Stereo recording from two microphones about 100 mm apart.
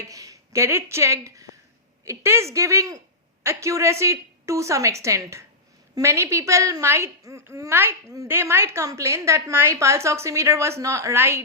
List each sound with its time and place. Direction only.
0.1 s a woman's voice: 35° right (ahead or behind)